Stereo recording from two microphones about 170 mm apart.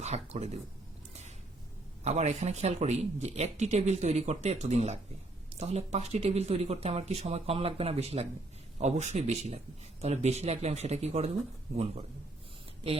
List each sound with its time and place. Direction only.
0.0 s speech: 40° right (ahead or behind)
2.0 s speech: 40° right (ahead or behind)